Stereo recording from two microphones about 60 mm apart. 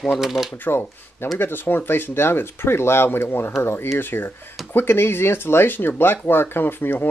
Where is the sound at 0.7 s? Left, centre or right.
Left.